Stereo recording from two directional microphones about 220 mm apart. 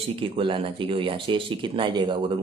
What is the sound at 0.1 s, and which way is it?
Speech, 25° right (ahead or behind).